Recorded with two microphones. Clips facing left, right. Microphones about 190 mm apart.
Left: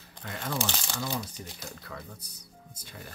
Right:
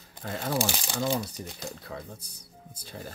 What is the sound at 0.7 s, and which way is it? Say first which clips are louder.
Speech: right 5 dB; 15° right (ahead or behind).